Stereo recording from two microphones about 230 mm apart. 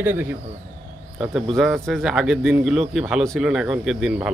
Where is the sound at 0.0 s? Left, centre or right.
Centre.